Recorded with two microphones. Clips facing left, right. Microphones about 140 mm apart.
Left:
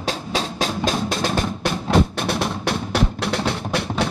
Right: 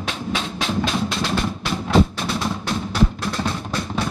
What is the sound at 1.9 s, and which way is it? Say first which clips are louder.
Music: right 1 dB; 60° left (ahead or behind).